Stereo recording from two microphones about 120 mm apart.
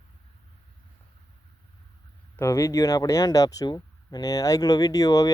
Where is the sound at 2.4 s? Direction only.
25° left (ahead or behind).